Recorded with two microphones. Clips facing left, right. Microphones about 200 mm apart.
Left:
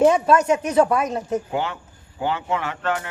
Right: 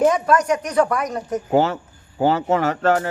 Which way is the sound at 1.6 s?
40° right (ahead or behind).